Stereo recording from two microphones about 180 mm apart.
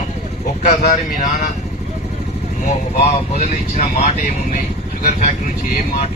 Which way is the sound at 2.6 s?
40° left (ahead or behind).